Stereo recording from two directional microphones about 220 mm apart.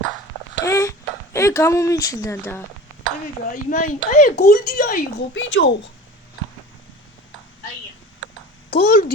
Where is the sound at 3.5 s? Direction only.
35° left (ahead or behind).